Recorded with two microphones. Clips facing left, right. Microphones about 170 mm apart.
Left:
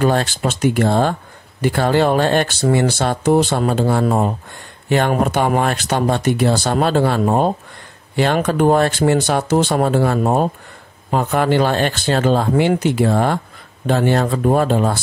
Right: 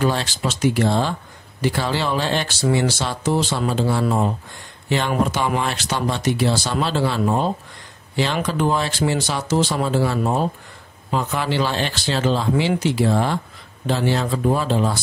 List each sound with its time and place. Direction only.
0.0 s speech: 50° left (ahead or behind)